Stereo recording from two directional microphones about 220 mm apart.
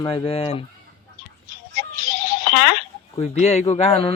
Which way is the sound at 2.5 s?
50° left (ahead or behind).